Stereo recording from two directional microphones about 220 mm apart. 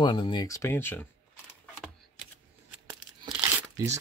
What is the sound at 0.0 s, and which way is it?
Speech, 20° left (ahead or behind).